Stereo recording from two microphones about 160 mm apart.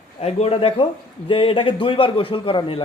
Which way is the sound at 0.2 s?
40° left (ahead or behind).